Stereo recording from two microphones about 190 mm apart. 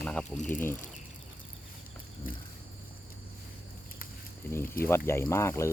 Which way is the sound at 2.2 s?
50° left (ahead or behind).